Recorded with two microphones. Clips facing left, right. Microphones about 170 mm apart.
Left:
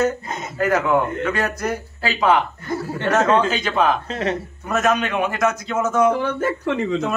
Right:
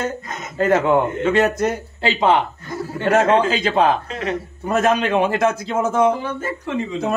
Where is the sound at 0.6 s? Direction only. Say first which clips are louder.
Right 3 dB; 25° right (ahead or behind).